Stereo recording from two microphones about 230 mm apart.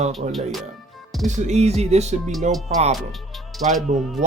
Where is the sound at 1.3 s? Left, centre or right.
Right.